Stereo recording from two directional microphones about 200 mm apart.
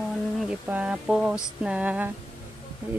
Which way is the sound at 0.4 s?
5° right (ahead or behind).